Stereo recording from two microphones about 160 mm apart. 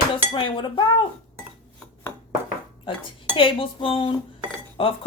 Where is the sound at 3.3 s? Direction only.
35° left (ahead or behind).